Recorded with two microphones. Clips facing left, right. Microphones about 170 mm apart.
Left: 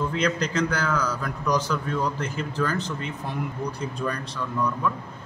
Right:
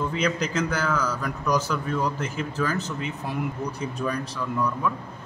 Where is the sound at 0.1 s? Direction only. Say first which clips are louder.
Left 1 dB; 5° right (ahead or behind).